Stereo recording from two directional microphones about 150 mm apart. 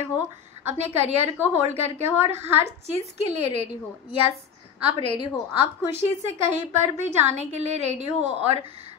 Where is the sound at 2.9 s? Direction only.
45° left (ahead or behind).